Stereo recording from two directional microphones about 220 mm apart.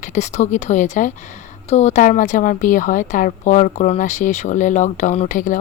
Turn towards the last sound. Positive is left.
turn(degrees=35)  # may be behind; listen again after turning